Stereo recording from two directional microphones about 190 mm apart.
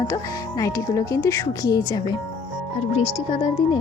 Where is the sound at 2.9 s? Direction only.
30° left (ahead or behind).